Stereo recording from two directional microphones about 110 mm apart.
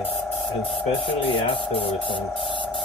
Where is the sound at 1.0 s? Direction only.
55° left (ahead or behind).